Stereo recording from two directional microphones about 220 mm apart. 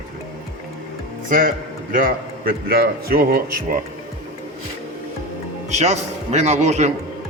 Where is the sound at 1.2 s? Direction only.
40° right (ahead or behind).